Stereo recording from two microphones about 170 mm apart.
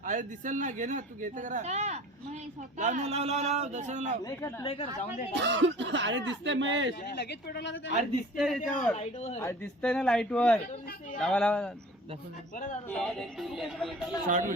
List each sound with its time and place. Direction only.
0.0 s speech: 50° right (ahead or behind)
4.2 s speech: 20° left (ahead or behind)
5.3 s speech: 90° right
7.0 s speech: 70° left (ahead or behind); by 7.9 s 90° left
8.4 s speech: centre (ahead or behind)
9.0 s speech: 40° left (ahead or behind)
9.8 s speech: 5° left (ahead or behind)
12.9 s speech: 5° left (ahead or behind)
14.3 s speech: 50° right (ahead or behind)